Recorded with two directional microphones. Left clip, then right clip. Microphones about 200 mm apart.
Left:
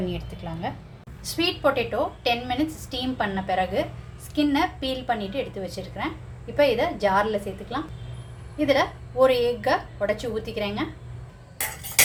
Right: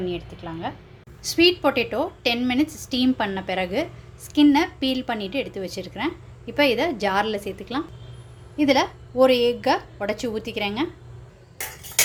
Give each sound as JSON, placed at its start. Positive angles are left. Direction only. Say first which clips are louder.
{"t": 0.1, "sound": "a woman's voice", "louder": "right 3 dB", "side_deg": -15}
{"t": 1.2, "sound": "a woman's voice", "louder": "right 5 dB", "side_deg": -40}